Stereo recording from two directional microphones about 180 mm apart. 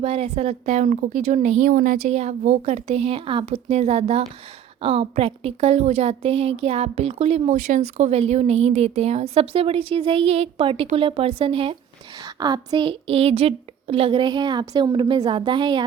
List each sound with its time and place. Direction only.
0.0 s a woman's voice: 35° right (ahead or behind)